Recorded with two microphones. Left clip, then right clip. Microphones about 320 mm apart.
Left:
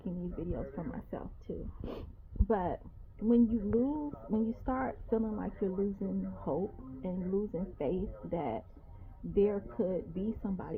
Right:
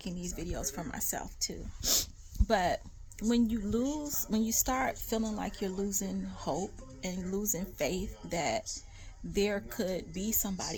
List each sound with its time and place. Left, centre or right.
0.0 s speech: centre